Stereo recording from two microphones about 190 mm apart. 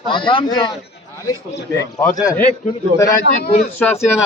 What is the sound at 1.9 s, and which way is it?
Speech, 10° left (ahead or behind).